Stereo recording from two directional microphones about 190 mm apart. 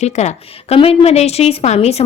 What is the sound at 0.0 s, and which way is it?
A woman's voice, 35° left (ahead or behind).